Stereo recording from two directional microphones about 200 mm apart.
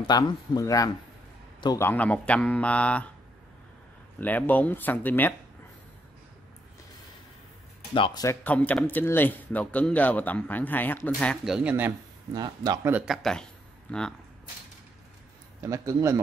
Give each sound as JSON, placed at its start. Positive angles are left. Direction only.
{"t": 0.0, "sound": "speech", "side_deg": 20}
{"t": 4.2, "sound": "speech", "side_deg": 10}
{"t": 7.9, "sound": "speech", "side_deg": 20}
{"t": 12.4, "sound": "speech", "side_deg": -20}
{"t": 12.9, "sound": "speech", "side_deg": 0}
{"t": 15.6, "sound": "speech", "side_deg": -15}